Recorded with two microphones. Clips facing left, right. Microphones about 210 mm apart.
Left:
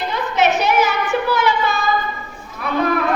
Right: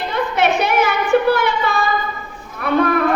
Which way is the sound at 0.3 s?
55° right (ahead or behind).